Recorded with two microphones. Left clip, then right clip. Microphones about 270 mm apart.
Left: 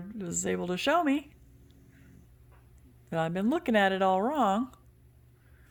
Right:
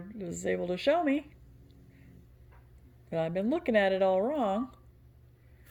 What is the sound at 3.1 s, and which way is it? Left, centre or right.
Speech, left.